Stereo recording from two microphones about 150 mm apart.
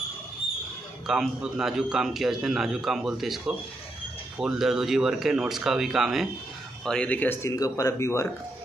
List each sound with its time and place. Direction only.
1.0 s a man's voice: 5° right (ahead or behind); by 8.3 s 20° left (ahead or behind)